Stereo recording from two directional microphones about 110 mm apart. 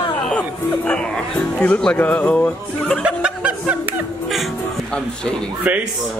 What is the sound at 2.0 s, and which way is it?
Music, 15° left (ahead or behind).